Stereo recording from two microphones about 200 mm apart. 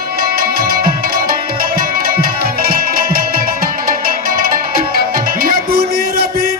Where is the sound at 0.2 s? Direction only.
45° right (ahead or behind).